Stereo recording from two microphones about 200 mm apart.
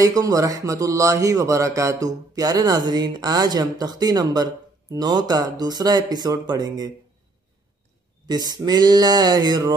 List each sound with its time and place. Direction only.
0.0 s speech: 15° right (ahead or behind)
8.3 s speech: 20° right (ahead or behind)